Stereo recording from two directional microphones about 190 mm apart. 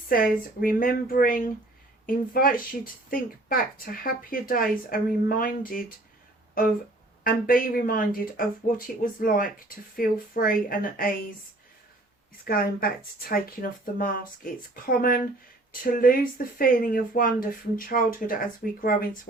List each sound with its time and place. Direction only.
0.1 s speech: 50° left (ahead or behind)
12.5 s speech: 50° left (ahead or behind)